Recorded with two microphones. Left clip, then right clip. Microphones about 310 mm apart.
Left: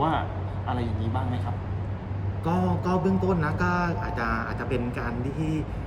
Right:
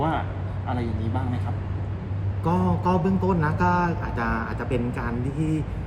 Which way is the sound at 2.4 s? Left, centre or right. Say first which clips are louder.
Right 3 dB; centre.